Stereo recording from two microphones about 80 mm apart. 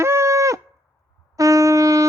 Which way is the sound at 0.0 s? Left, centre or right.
Right.